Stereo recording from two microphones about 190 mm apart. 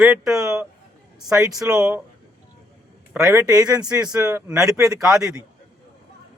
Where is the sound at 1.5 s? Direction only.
20° right (ahead or behind).